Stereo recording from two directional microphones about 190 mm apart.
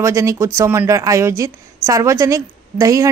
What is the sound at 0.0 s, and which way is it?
A woman's voice, 15° right (ahead or behind).